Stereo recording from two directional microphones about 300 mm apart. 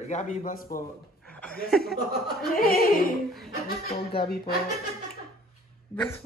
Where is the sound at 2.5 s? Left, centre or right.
Left.